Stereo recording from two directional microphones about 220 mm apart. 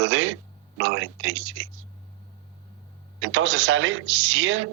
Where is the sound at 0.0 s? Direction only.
60° right (ahead or behind).